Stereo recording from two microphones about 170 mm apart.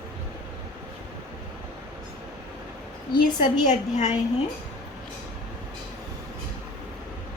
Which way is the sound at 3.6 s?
40° left (ahead or behind).